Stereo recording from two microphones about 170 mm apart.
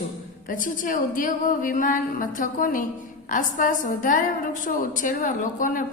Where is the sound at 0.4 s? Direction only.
50° left (ahead or behind).